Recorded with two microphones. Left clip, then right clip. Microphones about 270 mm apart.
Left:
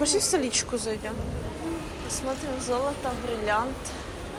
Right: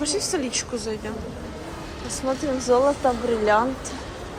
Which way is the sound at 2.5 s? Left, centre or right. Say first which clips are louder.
Right 11 dB; right.